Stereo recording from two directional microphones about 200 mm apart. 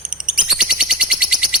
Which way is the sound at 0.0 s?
5° right (ahead or behind).